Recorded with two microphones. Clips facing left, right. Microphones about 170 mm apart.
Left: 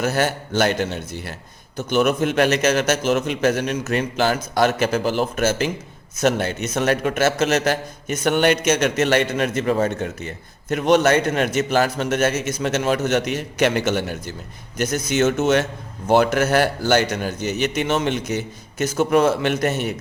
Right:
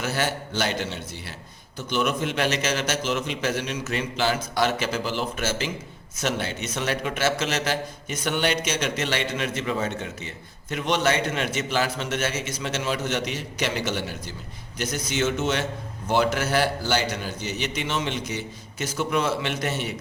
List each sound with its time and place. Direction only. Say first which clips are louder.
0.0 s a man's voice: left 6 dB; 45° left (ahead or behind)